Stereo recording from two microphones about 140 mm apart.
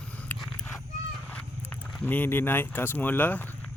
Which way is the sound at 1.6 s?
10° left (ahead or behind).